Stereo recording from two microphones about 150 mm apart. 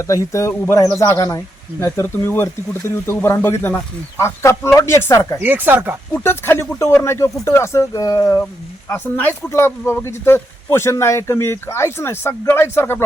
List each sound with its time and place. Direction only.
0.0 s speech: 20° left (ahead or behind)
5.4 s speech: 15° right (ahead or behind)
6.1 s speech: 15° left (ahead or behind)